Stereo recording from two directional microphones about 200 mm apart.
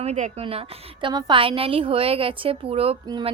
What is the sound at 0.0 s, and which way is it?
A woman's voice, 35° right (ahead or behind).